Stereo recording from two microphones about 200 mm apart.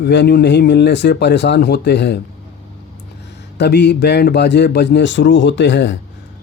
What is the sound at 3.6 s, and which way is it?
Speech, 55° left (ahead or behind).